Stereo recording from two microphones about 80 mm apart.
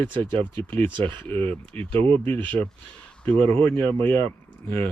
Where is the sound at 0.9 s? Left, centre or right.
Right.